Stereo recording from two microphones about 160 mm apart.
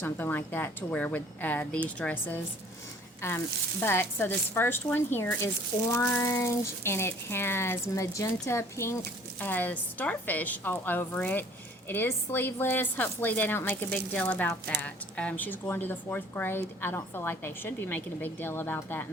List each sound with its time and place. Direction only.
0.0 s a woman's voice: 10° left (ahead or behind)